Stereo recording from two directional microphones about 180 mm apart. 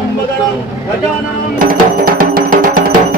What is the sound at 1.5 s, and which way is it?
Music, 50° right (ahead or behind).